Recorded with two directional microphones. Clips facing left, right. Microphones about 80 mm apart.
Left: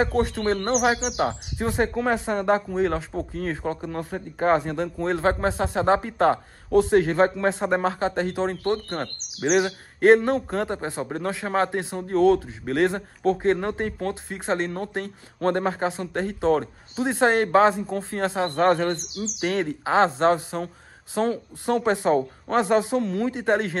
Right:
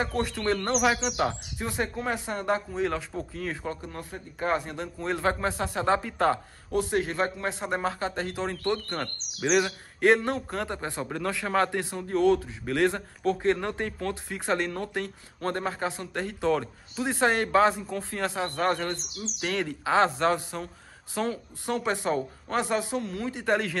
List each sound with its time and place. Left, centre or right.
0.7 s speech: left
5.1 s speech: left
9.4 s speech: left
10.0 s speech: left
23.0 s speech: left
23.3 s speech: left